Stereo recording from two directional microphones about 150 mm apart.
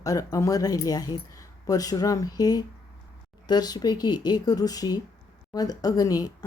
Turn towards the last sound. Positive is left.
turn(degrees=25)  # may be behind; listen again after turning